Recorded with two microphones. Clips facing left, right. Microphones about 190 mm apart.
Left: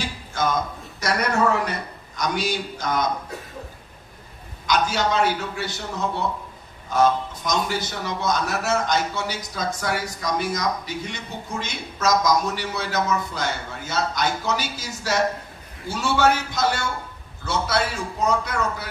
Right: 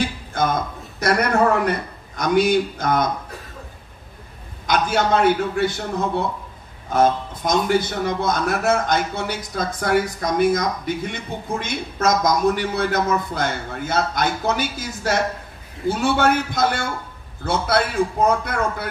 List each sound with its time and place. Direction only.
0.0 s a man's voice: 55° right (ahead or behind)
4.6 s speech: 55° right (ahead or behind)